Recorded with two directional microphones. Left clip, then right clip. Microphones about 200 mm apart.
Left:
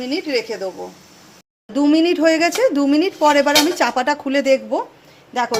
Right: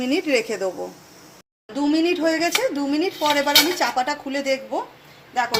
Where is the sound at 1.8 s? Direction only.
50° left (ahead or behind).